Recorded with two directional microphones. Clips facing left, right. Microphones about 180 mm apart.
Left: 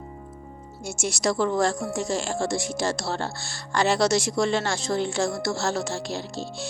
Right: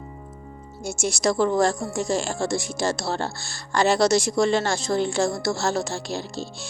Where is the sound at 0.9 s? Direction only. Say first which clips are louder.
Right 2 dB; 40° right (ahead or behind).